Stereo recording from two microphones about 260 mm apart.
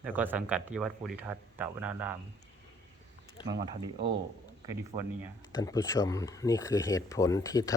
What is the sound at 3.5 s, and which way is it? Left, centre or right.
Speech, centre.